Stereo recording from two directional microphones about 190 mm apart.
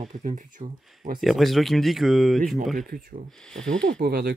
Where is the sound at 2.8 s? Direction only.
50° right (ahead or behind).